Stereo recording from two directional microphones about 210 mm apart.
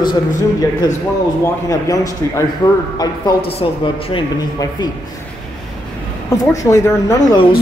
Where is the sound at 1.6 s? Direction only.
15° left (ahead or behind).